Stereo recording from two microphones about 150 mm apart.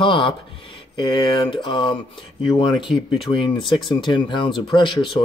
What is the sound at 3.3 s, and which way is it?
Speech, 35° left (ahead or behind).